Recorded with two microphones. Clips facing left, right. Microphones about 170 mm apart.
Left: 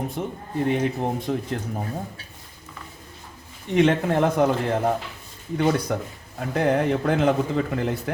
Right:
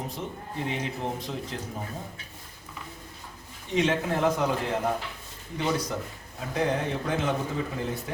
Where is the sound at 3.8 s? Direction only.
60° left (ahead or behind).